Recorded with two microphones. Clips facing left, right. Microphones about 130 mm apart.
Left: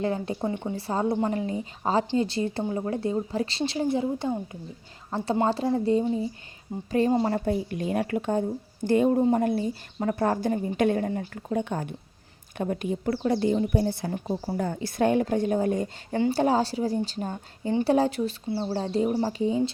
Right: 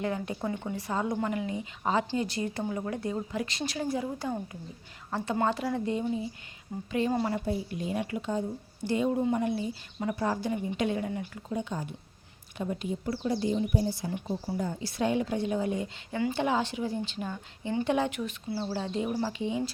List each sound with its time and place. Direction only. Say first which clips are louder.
0.0 s a woman's voice: left 4 dB; 30° left (ahead or behind)
7.2 s speech: left 4 dB; 40° left (ahead or behind)
7.4 s speech: left 5 dB; 60° left (ahead or behind); by 11.5 s 40° left (ahead or behind)
11.5 s speech: left 5 dB; 60° left (ahead or behind); by 19.6 s 35° left (ahead or behind)